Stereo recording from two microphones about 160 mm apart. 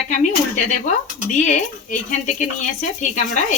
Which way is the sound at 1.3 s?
50° left (ahead or behind).